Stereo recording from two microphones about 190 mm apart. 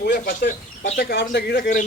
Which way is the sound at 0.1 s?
45° left (ahead or behind).